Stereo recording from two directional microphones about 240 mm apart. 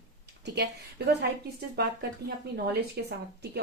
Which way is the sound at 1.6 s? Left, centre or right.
Right.